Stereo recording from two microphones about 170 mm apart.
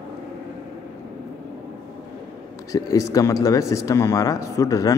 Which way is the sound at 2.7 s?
20° left (ahead or behind).